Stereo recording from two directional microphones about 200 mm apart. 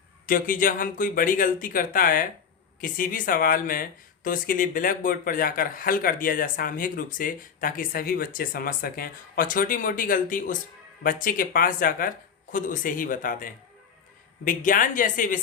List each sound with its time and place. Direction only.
0.3 s speech: 45° left (ahead or behind)